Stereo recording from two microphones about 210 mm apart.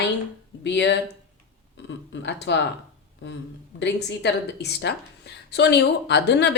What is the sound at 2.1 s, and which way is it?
Speech, 55° left (ahead or behind).